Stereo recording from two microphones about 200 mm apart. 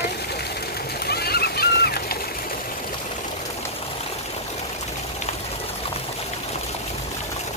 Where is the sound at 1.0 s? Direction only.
50° left (ahead or behind).